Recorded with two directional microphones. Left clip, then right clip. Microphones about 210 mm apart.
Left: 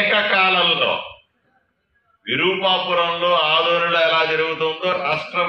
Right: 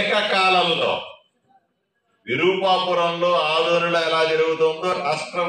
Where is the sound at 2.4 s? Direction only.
55° right (ahead or behind).